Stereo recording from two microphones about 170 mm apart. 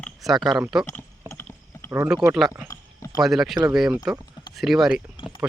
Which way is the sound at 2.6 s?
20° left (ahead or behind).